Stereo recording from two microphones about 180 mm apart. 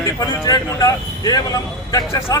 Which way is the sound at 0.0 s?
20° left (ahead or behind).